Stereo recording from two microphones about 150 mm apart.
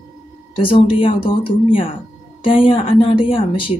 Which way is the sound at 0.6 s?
35° left (ahead or behind).